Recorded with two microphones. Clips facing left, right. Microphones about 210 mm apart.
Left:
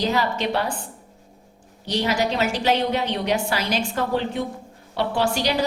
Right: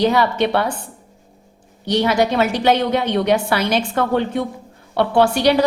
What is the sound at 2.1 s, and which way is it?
A woman's voice, 60° right (ahead or behind).